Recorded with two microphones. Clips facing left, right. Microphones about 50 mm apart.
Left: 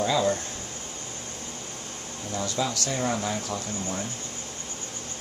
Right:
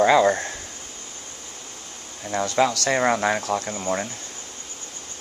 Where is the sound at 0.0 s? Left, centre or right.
Right.